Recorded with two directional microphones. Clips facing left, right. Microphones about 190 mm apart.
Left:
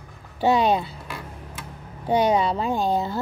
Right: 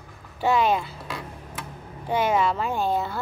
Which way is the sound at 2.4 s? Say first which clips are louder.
Left 1 dB; 35° left (ahead or behind).